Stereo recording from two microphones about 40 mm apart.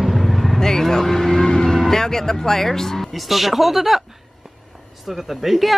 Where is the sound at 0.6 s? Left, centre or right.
Centre.